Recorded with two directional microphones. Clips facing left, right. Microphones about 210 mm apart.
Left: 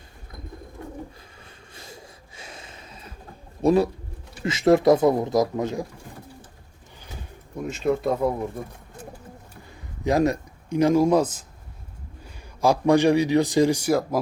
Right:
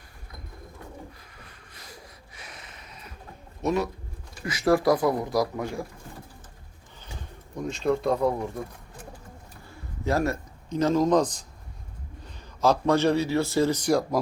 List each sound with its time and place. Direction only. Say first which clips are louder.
1.4 s a sound: left 3 dB; 25° left (ahead or behind)
3.6 s speech: left 7 dB; 30° left (ahead or behind)
7.6 s speech: left 1 dB; 5° left (ahead or behind)
9.6 s a man's voice: left 4 dB; 15° left (ahead or behind)